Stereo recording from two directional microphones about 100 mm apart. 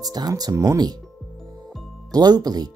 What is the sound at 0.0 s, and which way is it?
Speech, 40° right (ahead or behind).